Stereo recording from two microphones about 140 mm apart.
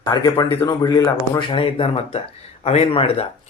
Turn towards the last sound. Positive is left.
turn(degrees=45)  # may be behind; listen again after turning